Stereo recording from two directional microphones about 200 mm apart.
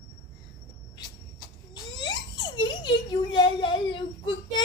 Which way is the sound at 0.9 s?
20° left (ahead or behind).